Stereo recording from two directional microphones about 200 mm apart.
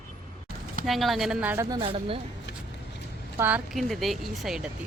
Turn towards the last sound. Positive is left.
turn(degrees=0)  # may be behind; listen again after turning